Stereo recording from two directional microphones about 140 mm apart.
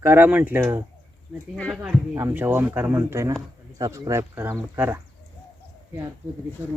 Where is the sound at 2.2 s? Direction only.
15° right (ahead or behind).